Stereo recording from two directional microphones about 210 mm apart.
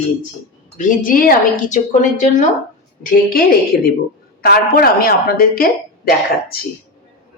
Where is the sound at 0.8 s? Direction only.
40° left (ahead or behind).